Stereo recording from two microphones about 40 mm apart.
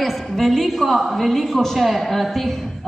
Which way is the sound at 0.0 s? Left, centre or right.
Centre.